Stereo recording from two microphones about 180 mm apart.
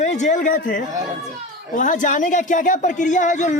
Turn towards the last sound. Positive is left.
turn(degrees=45)  # may be behind; listen again after turning